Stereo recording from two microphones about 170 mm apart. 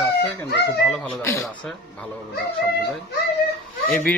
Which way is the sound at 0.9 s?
10° left (ahead or behind).